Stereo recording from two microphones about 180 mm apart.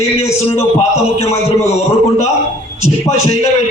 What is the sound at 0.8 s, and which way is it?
Speech, 35° left (ahead or behind).